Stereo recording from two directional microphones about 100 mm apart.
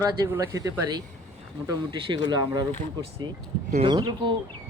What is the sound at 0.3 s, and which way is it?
Speech, 30° right (ahead or behind).